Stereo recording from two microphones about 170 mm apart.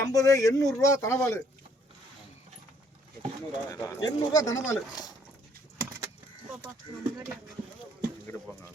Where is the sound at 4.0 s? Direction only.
20° left (ahead or behind).